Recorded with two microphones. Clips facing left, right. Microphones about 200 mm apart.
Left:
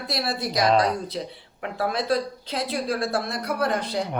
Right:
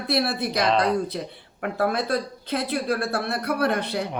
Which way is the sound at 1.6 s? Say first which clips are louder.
Right 2 dB; 55° right (ahead or behind).